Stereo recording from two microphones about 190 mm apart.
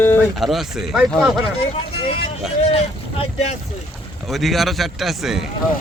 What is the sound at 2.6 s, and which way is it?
Speech, 35° left (ahead or behind).